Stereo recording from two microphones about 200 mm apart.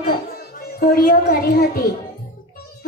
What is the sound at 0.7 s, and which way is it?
A child's voice, 45° left (ahead or behind).